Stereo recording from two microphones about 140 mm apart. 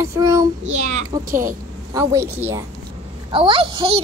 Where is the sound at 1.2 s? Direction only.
75° right (ahead or behind).